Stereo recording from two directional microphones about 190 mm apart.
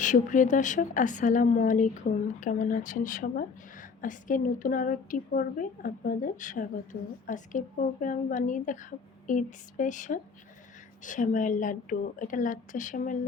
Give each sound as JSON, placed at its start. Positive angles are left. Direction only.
{"t": 0.0, "sound": "speech", "side_deg": 40}